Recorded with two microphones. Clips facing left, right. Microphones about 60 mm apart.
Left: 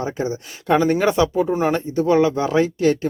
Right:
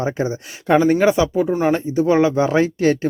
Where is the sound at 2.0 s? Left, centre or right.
Right.